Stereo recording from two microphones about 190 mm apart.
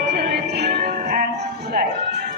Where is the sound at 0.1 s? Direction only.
55° right (ahead or behind).